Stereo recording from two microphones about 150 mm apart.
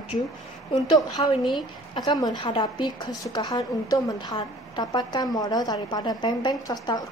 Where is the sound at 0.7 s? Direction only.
25° left (ahead or behind).